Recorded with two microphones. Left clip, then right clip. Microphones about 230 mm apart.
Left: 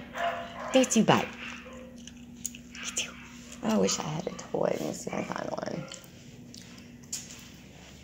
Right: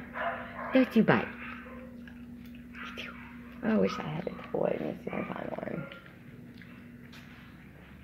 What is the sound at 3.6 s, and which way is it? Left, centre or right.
Speech, centre.